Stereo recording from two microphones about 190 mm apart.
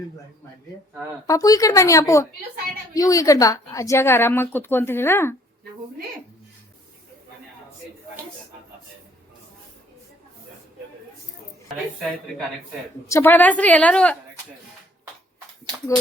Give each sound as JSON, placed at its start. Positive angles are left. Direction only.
{"t": 1.3, "sound": "a woman's voice", "side_deg": 20}
{"t": 13.1, "sound": "a woman's voice", "side_deg": 10}